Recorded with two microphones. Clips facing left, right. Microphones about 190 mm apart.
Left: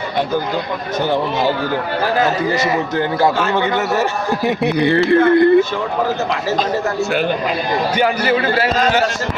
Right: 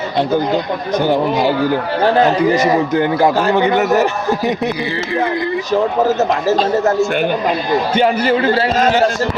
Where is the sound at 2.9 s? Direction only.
20° right (ahead or behind).